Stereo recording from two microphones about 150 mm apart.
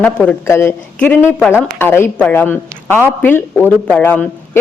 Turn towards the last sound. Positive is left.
turn(degrees=10)  # may be behind; listen again after turning